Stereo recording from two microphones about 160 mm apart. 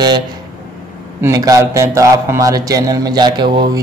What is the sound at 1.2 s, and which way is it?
A man's voice, 20° right (ahead or behind).